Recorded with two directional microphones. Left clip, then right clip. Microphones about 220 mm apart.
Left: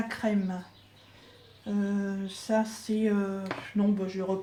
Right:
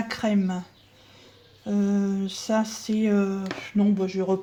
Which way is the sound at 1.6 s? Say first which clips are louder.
Right 6 dB; 50° right (ahead or behind).